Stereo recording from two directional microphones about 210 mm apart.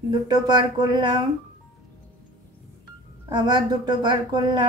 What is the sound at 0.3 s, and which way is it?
Speech, 20° right (ahead or behind).